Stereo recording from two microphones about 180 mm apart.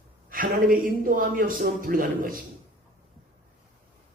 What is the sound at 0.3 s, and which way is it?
A man's voice, 50° right (ahead or behind).